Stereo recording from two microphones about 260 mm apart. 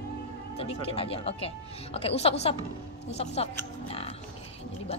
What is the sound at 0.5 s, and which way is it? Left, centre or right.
A woman's voice, left.